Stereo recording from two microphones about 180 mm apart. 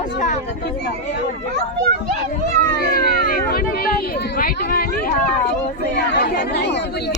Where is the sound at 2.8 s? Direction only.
55° left (ahead or behind).